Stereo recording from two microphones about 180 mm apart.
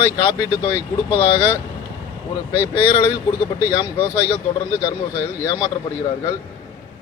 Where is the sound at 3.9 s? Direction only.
15° left (ahead or behind).